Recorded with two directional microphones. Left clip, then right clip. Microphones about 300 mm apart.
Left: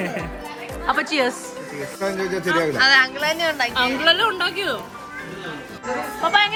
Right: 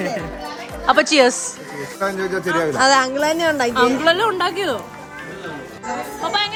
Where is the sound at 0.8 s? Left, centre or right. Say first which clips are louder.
Right 7 dB; centre.